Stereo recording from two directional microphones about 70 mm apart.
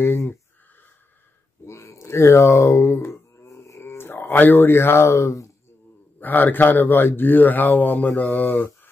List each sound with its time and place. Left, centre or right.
0.0 s speech: left
1.7 s a sound: left
6.1 s speech: left